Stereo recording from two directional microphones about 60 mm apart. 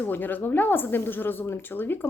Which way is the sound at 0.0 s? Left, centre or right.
Left.